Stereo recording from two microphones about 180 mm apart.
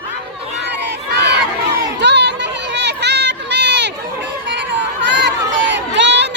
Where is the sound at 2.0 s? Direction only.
75° right (ahead or behind).